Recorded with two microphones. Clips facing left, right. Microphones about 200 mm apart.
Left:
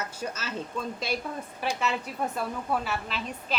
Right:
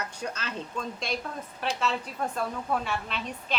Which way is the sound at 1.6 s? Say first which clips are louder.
Even; 10° left (ahead or behind).